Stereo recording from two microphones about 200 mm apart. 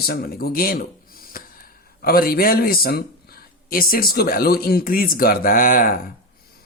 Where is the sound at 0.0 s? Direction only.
50° left (ahead or behind).